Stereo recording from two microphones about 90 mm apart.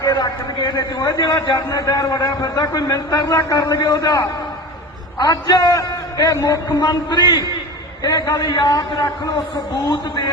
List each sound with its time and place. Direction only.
0.0 s a man's voice: 50° left (ahead or behind)
6.7 s a man's voice: 50° left (ahead or behind)
8.0 s a man's voice: 45° left (ahead or behind)